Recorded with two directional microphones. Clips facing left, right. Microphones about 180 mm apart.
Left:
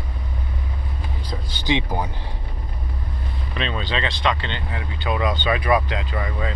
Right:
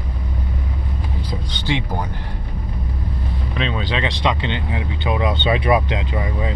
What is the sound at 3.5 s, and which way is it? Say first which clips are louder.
Speech: right 2 dB; 10° right (ahead or behind).